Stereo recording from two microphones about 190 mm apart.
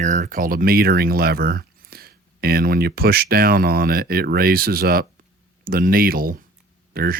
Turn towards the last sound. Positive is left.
turn(degrees=-50)  # may be behind; listen again after turning